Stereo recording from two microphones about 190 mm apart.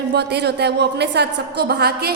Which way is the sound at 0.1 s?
60° right (ahead or behind).